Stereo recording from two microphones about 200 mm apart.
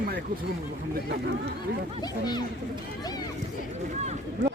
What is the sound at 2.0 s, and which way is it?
Speech, 20° left (ahead or behind).